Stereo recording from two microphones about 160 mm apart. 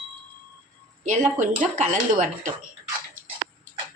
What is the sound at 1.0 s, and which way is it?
A woman's voice, 50° right (ahead or behind).